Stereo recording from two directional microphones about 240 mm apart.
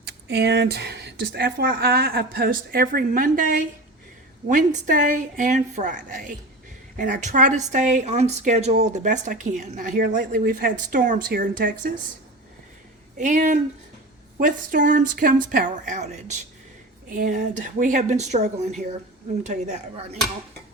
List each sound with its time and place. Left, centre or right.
0.0 s speech: right
13.1 s speech: right